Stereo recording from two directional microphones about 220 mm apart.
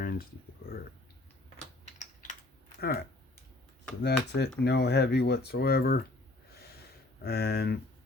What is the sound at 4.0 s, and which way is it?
Speech, 50° left (ahead or behind).